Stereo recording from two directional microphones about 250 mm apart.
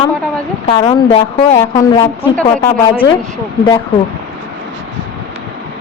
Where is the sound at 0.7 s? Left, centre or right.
Centre.